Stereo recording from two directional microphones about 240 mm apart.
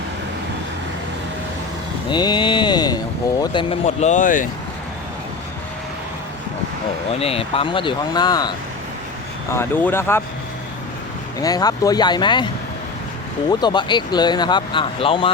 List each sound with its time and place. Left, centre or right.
2.0 s a sound: centre
3.4 s speech: centre
7.2 s speech: left
11.3 s speech: centre
13.5 s speech: centre